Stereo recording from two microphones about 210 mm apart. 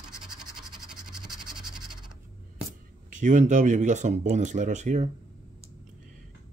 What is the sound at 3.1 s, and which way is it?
Speech, 35° right (ahead or behind).